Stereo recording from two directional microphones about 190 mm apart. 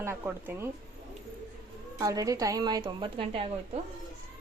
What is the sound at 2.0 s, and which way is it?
Speech, 20° right (ahead or behind).